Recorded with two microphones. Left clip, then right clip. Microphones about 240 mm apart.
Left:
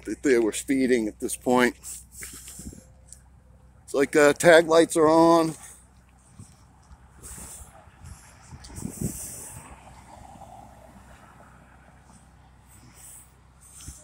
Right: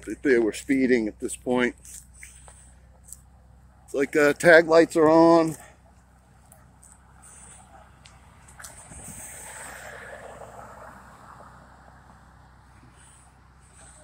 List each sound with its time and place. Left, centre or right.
0.0 s speech: centre
1.4 s speech: centre
3.9 s speech: centre
8.7 s vehicle: right
11.3 s vehicle: left